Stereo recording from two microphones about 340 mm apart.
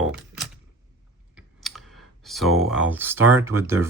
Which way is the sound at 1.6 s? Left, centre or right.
Centre.